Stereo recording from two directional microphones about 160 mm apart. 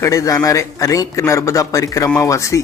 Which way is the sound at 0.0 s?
20° left (ahead or behind).